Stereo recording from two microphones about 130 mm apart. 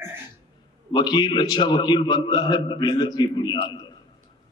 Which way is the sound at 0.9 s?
35° left (ahead or behind).